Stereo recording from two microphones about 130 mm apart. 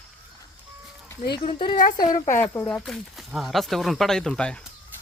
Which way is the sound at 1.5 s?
50° left (ahead or behind).